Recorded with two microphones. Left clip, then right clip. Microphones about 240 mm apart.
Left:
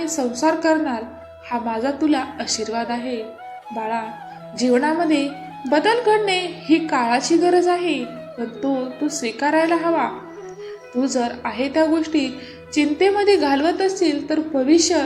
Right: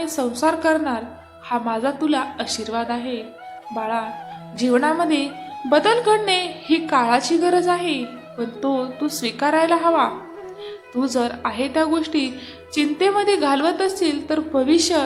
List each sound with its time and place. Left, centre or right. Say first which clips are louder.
0.0 s a woman's voice: even; centre
6.3 s a woman's voice: left 1 dB; right
6.7 s a woman's voice: right 2 dB; centre